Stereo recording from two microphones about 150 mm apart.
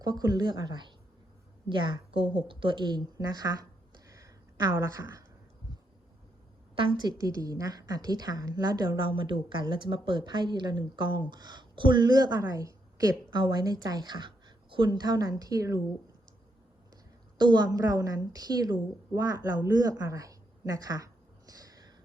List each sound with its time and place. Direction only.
0.0 s a woman's voice: 25° right (ahead or behind)
4.1 s a sound: 20° right (ahead or behind)
6.7 s a woman's voice: 30° right (ahead or behind)
17.3 s a woman's voice: 30° right (ahead or behind)